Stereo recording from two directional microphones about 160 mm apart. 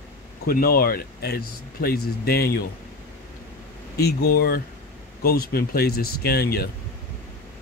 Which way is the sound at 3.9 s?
75° left (ahead or behind).